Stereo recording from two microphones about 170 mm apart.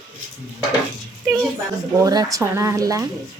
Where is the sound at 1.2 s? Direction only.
Centre (ahead or behind).